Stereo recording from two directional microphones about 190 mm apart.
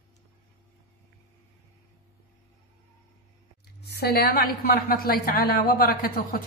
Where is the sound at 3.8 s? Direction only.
60° left (ahead or behind).